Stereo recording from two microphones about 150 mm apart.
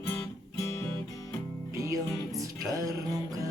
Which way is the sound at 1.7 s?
20° right (ahead or behind).